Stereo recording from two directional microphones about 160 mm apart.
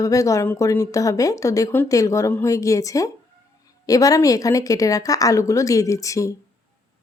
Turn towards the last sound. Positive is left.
turn(degrees=20)  # may be behind; listen again after turning